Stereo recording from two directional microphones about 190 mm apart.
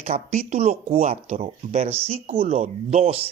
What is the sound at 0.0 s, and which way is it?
A man's voice, 35° right (ahead or behind).